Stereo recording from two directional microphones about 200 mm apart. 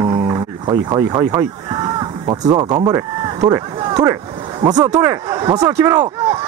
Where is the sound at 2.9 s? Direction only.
15° right (ahead or behind).